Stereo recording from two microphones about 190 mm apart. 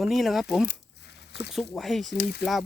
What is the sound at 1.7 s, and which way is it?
Speech, centre (ahead or behind).